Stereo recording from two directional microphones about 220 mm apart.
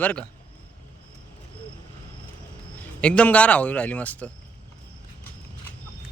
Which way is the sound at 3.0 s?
5° left (ahead or behind).